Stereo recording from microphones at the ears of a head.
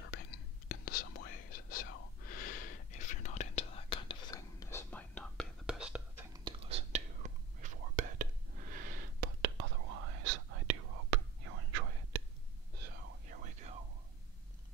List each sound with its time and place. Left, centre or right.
0.0 s whispering: left
5.2 s whispering: centre
6.4 s whispering: right